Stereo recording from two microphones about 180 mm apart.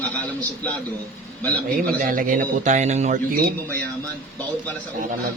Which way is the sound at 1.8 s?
50° right (ahead or behind).